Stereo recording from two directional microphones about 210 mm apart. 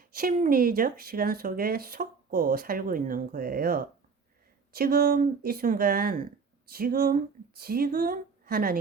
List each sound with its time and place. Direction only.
0.2 s speech: 45° right (ahead or behind)